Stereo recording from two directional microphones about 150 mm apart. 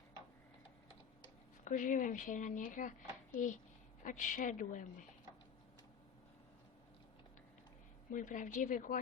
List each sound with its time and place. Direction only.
1.6 s speech: 60° left (ahead or behind)
8.1 s speech: 60° left (ahead or behind)